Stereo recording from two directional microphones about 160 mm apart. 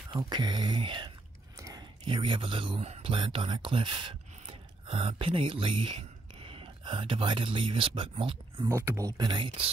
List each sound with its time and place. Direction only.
0.1 s speech: 25° right (ahead or behind)
8.6 s speech: 15° right (ahead or behind)